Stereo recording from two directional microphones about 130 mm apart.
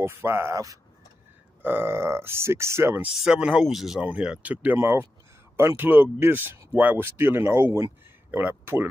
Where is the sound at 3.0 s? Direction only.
5° right (ahead or behind).